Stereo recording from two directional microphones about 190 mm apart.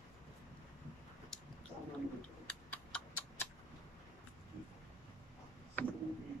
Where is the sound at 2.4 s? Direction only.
5° left (ahead or behind).